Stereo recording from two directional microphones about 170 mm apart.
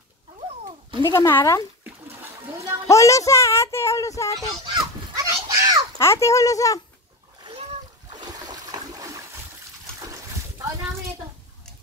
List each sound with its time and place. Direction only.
1.0 s speech: 15° left (ahead or behind)
2.9 s speech: 20° left (ahead or behind)
4.6 s a sound: 20° right (ahead or behind)
5.9 s speech: 15° left (ahead or behind)
8.1 s splash: 25° right (ahead or behind)